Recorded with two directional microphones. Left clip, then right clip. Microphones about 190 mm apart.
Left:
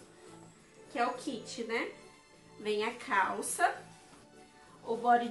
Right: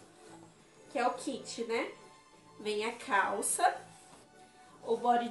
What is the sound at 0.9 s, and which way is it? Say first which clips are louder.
Speech: right 1 dB; 15° left (ahead or behind).